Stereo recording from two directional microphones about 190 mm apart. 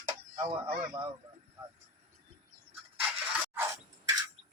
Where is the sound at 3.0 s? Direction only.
10° right (ahead or behind).